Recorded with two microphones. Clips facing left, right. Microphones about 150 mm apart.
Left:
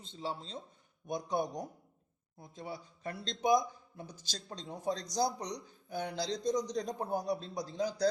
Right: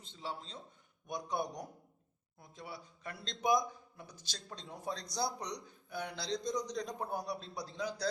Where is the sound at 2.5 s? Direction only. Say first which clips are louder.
Left 4 dB; 35° left (ahead or behind).